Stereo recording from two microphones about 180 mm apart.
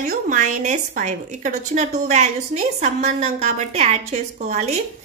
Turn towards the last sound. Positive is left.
turn(degrees=-40)  # may be behind; listen again after turning